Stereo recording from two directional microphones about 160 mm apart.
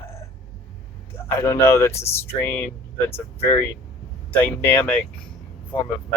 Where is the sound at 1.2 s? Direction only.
15° left (ahead or behind).